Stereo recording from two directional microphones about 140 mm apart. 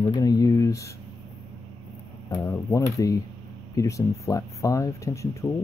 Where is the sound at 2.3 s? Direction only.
20° left (ahead or behind).